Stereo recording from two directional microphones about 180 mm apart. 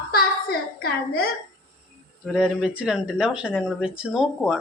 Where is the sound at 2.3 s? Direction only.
5° right (ahead or behind).